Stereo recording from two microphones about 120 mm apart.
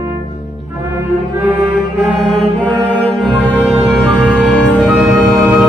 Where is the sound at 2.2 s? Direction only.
10° left (ahead or behind).